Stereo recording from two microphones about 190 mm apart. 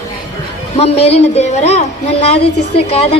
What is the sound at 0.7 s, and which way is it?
A woman's voice, 35° left (ahead or behind).